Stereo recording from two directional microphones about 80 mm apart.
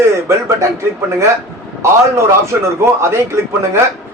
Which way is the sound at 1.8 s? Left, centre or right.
Right.